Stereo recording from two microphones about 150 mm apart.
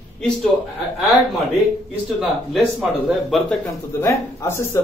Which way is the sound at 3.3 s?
Centre (ahead or behind).